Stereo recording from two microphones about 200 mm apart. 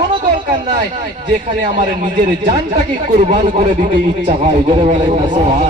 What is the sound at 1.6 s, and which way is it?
Speech, 35° right (ahead or behind).